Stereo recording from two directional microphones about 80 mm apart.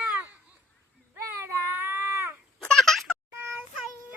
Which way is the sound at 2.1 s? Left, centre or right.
Right.